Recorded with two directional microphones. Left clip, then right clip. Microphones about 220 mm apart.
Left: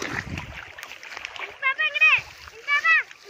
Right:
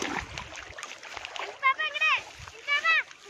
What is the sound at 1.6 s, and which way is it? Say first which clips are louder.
Splash: left 5 dB; 50° right (ahead or behind).